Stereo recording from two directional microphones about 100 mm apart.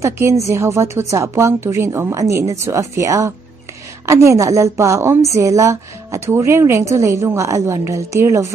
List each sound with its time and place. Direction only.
0.0 s a woman's voice: 30° right (ahead or behind)